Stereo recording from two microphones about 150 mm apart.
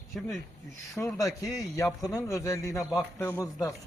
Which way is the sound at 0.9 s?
20° left (ahead or behind).